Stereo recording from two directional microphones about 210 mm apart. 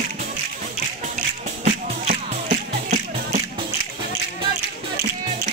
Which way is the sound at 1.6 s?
35° right (ahead or behind).